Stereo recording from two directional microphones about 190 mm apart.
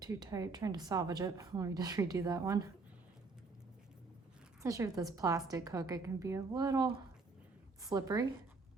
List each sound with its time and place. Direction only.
0.0 s speech: 20° right (ahead or behind)
4.6 s a woman's voice: 15° right (ahead or behind)